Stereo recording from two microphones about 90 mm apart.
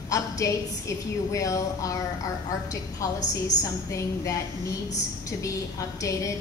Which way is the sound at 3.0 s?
40° left (ahead or behind).